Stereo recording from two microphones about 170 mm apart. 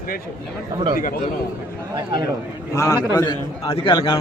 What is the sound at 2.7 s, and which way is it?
A man's voice, 20° left (ahead or behind).